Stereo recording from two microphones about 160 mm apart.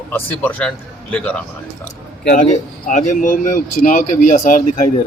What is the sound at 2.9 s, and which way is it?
Speech, 55° left (ahead or behind).